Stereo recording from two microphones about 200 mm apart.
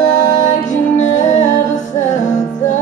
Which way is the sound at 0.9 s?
35° left (ahead or behind).